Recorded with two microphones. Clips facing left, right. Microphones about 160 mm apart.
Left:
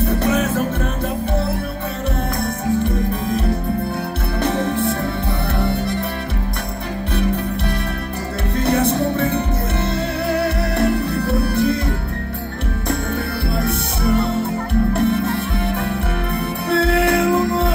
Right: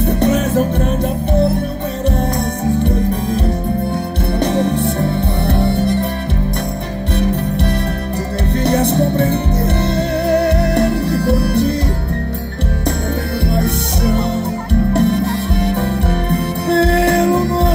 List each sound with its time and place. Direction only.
0.0 s music: 30° right (ahead or behind)
4.5 s music: 30° right (ahead or behind)
10.6 s music: 30° right (ahead or behind)
15.0 s music: 30° right (ahead or behind)